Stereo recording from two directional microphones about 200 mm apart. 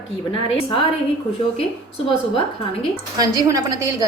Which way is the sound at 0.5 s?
25° left (ahead or behind).